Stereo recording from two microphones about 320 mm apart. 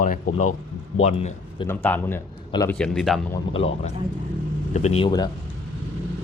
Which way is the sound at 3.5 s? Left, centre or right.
Centre.